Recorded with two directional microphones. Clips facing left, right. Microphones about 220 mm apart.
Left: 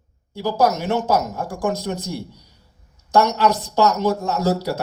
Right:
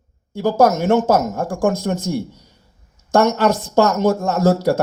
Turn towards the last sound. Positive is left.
turn(degrees=-50)  # may be behind; listen again after turning